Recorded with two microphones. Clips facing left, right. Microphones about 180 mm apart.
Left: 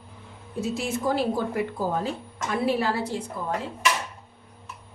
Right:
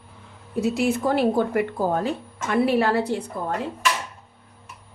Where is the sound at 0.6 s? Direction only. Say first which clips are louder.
Right 5 dB; 65° right (ahead or behind).